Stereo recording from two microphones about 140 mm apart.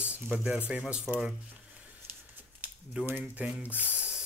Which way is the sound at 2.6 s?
5° right (ahead or behind).